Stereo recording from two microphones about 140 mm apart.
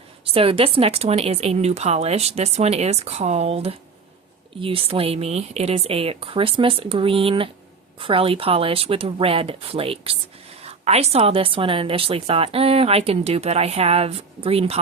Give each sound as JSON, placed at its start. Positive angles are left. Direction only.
{"t": 0.3, "sound": "a woman's voice", "side_deg": -40}